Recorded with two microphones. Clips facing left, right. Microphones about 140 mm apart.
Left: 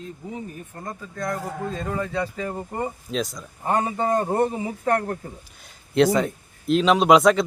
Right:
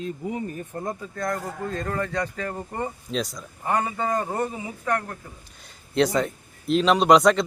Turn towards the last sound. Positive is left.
turn(degrees=0)  # may be behind; listen again after turning